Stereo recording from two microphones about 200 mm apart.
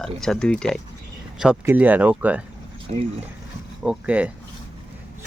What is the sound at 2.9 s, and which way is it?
Speech, 35° right (ahead or behind).